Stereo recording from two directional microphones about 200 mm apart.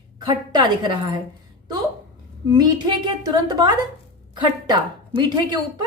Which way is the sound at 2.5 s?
20° right (ahead or behind).